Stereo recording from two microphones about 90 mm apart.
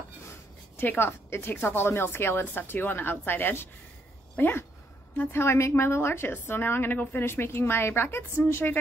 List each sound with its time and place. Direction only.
0.7 s a woman's voice: 25° left (ahead or behind)